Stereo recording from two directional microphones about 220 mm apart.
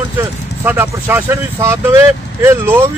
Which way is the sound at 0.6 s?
10° right (ahead or behind).